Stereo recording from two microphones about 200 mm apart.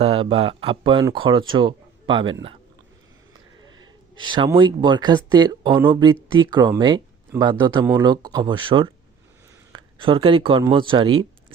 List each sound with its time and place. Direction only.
0.0 s speech: 30° right (ahead or behind)
4.1 s speech: 25° right (ahead or behind)